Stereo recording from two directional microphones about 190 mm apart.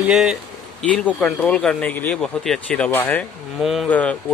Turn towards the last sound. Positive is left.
turn(degrees=5)  # may be behind; listen again after turning